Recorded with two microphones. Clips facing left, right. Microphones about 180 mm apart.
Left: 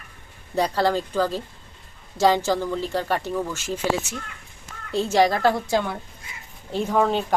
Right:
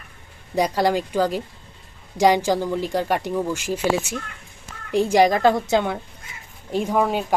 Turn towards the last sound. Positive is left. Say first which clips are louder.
# even
turn(degrees=-10)  # may be behind; listen again after turning